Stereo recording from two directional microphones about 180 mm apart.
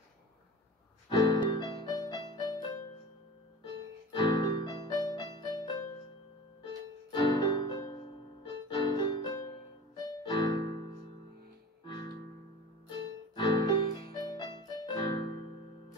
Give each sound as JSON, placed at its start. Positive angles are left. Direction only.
{"t": 1.0, "sound": "keyboard", "side_deg": 25}
{"t": 4.1, "sound": "piano", "side_deg": 25}
{"t": 6.6, "sound": "music", "side_deg": 25}
{"t": 10.0, "sound": "keyboard", "side_deg": 20}
{"t": 11.8, "sound": "music", "side_deg": 25}
{"t": 13.4, "sound": "keyboard", "side_deg": 25}